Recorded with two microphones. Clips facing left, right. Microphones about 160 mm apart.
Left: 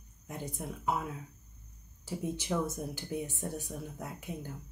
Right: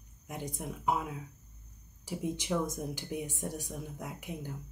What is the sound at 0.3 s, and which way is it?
Speech, 15° right (ahead or behind).